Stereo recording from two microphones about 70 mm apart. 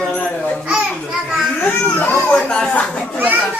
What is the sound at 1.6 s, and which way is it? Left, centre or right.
Speech, left.